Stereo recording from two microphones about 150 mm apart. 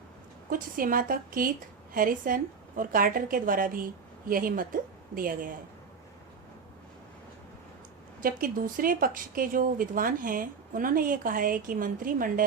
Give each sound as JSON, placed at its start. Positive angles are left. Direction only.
{"t": 0.5, "sound": "speech", "side_deg": -65}
{"t": 8.2, "sound": "speech", "side_deg": -65}